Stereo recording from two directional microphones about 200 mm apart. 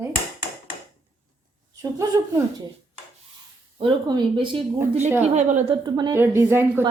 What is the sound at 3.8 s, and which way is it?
A woman's voice, 25° right (ahead or behind).